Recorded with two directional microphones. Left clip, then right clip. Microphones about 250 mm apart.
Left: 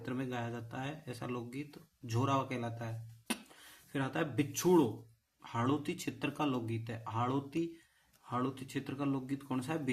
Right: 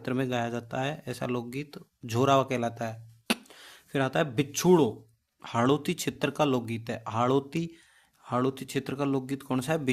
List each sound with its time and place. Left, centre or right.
0.0 s speech: right